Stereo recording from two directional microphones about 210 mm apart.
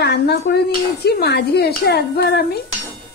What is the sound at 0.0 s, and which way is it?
Dishes, 50° left (ahead or behind).